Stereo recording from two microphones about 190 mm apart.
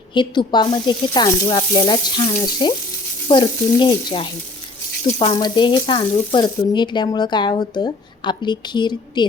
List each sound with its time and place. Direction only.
0.1 s speech: 25° left (ahead or behind)